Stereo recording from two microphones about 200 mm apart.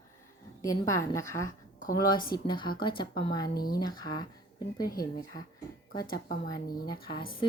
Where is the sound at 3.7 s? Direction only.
20° left (ahead or behind).